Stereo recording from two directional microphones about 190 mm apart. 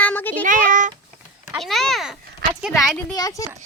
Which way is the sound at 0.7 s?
45° right (ahead or behind).